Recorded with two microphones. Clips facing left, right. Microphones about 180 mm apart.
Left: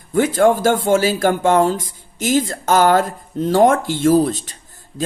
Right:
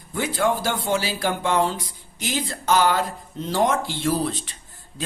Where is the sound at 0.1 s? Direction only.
50° left (ahead or behind).